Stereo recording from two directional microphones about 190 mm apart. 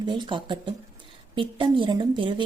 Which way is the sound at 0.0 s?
25° right (ahead or behind).